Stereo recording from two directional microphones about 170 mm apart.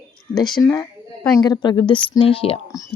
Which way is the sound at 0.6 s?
25° left (ahead or behind).